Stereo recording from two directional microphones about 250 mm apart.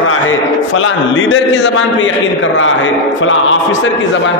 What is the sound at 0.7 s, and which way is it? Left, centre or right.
A man's voice, left.